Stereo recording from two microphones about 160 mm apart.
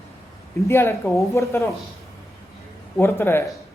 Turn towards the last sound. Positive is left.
turn(degrees=15)  # may be behind; listen again after turning